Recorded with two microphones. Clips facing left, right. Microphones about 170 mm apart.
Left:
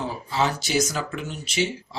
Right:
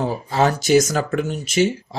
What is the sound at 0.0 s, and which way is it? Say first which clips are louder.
Speech: right 6 dB; 50° right (ahead or behind).